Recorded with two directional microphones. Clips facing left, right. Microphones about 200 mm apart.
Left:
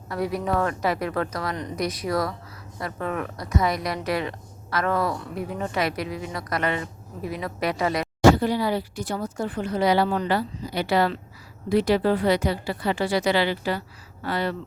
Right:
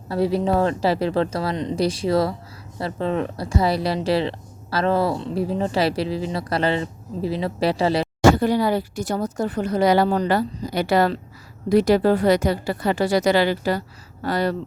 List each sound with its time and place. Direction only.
0.1 s a woman's voice: 30° right (ahead or behind)
8.2 s speech: 45° right (ahead or behind)